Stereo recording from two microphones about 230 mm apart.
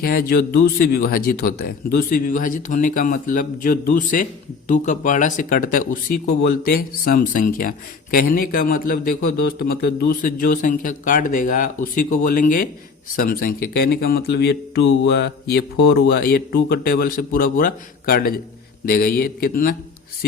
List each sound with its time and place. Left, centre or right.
0.0 s a man's voice: left